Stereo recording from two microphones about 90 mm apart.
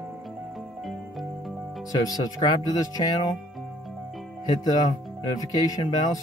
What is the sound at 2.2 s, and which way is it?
Speech, 45° left (ahead or behind).